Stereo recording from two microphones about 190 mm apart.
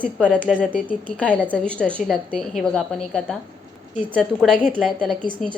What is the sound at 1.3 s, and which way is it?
A woman's voice, 10° left (ahead or behind).